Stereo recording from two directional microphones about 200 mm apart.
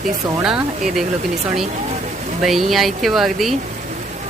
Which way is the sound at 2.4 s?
Centre (ahead or behind).